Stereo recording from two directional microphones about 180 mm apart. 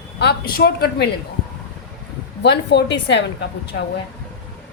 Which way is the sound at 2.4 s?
75° left (ahead or behind).